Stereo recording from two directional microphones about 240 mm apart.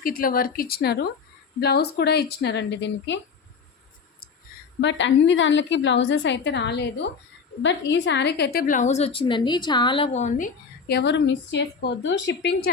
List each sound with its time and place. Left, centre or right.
0.0 s a woman's voice: left
4.8 s a woman's voice: left